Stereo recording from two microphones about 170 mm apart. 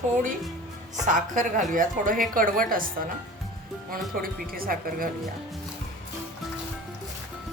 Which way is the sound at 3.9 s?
60° right (ahead or behind).